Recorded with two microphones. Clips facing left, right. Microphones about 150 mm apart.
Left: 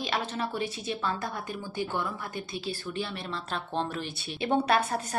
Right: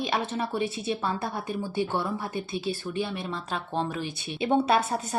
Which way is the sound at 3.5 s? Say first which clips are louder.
Right 1 dB; 10° right (ahead or behind).